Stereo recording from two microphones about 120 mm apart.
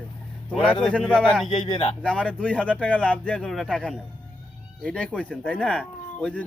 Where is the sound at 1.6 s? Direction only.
45° left (ahead or behind).